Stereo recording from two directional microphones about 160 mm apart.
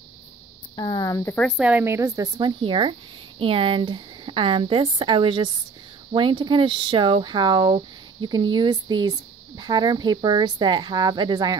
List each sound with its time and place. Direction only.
0.7 s speech: 25° left (ahead or behind)
1.6 s speech: 10° right (ahead or behind); by 11.5 s 25° right (ahead or behind)